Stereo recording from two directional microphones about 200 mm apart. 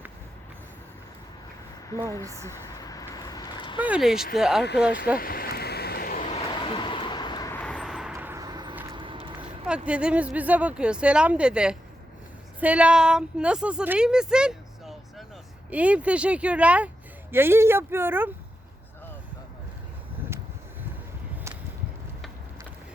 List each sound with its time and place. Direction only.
2.6 s vehicle: 20° left (ahead or behind)
3.8 s a woman's voice: 5° right (ahead or behind)
5.1 s a sound: 45° left (ahead or behind); by 7.5 s 20° left (ahead or behind)
7.5 s vehicle: 5° left (ahead or behind)
8.1 s a sound: 10° right (ahead or behind)
9.0 s vehicle: 25° right (ahead or behind)
9.6 s a woman's voice: 5° right (ahead or behind)